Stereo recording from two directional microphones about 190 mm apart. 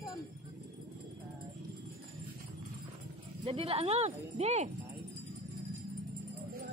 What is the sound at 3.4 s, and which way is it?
Speech, 30° right (ahead or behind).